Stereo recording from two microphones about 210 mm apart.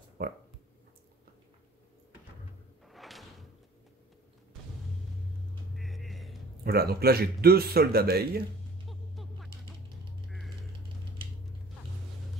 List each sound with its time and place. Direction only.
0.2 s speech: 45° right (ahead or behind)
2.9 s slam: centre (ahead or behind)
5.8 s music: centre (ahead or behind)
6.6 s speech: 45° right (ahead or behind)
8.8 s a sound: centre (ahead or behind)